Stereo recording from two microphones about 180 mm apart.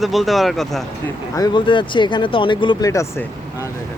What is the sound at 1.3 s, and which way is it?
Speech, 25° left (ahead or behind).